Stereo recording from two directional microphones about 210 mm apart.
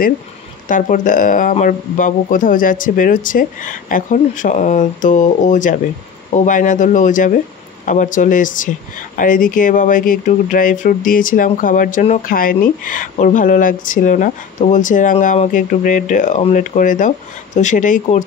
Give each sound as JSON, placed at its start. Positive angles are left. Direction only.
{"t": 0.7, "sound": "speech", "side_deg": 40}